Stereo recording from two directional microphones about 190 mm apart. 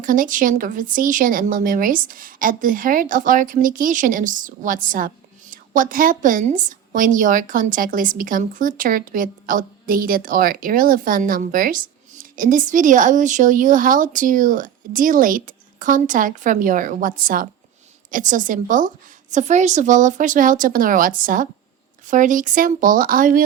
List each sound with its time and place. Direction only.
0.0 s speech: 45° right (ahead or behind)